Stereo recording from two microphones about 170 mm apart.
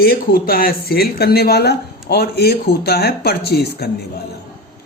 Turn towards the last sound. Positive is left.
turn(degrees=70)  # may be behind; listen again after turning